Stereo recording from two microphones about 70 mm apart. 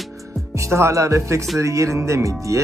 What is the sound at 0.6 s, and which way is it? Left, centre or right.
Speech, right.